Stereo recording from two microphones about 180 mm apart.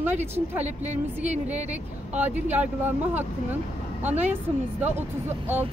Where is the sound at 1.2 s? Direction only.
40° right (ahead or behind).